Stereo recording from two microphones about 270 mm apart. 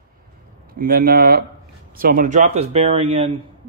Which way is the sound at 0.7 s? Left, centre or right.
Right.